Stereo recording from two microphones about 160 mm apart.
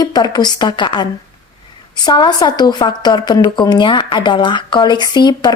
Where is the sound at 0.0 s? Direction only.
25° left (ahead or behind).